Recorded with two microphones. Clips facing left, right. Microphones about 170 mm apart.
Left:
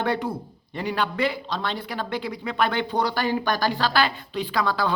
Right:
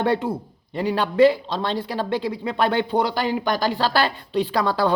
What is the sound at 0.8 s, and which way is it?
Speech, 30° right (ahead or behind).